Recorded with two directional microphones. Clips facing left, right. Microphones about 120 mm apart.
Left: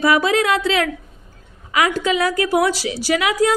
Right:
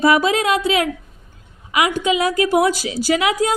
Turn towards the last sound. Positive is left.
turn(degrees=-20)  # may be behind; listen again after turning